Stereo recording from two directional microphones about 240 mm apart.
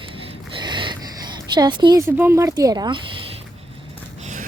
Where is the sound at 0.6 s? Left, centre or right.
Centre.